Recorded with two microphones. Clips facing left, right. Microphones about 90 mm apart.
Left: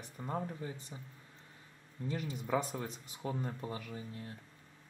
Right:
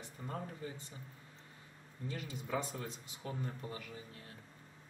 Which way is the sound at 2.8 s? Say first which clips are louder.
Left 3 dB; 30° left (ahead or behind).